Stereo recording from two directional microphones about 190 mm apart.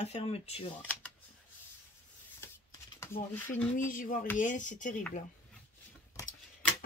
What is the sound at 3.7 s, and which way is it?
Speech, 45° left (ahead or behind).